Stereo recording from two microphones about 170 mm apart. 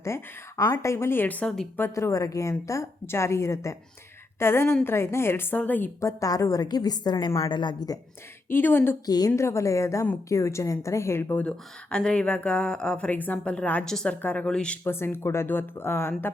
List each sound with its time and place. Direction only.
0.0 s a woman's voice: 20° left (ahead or behind)
8.4 s a woman's voice: 15° left (ahead or behind)